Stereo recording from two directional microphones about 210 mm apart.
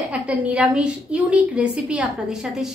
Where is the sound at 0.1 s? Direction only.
5° right (ahead or behind).